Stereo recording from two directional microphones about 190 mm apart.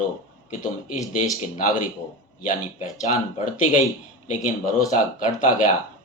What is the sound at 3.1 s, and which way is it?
Speech, 40° left (ahead or behind).